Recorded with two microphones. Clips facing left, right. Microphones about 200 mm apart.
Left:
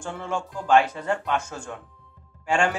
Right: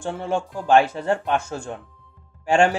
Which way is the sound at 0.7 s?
30° right (ahead or behind).